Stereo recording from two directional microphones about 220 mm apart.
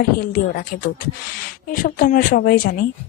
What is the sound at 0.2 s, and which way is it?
Speech, 40° left (ahead or behind).